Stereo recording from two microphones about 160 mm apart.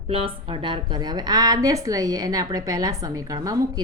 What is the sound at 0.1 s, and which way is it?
Speech, 35° right (ahead or behind).